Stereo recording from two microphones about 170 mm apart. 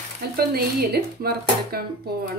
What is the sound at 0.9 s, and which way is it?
A woman's voice, 65° right (ahead or behind).